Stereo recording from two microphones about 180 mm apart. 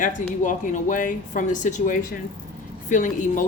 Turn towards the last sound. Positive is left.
turn(degrees=45)  # may be behind; listen again after turning